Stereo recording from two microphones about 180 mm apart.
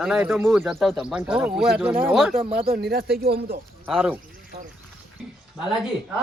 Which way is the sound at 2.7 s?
55° right (ahead or behind).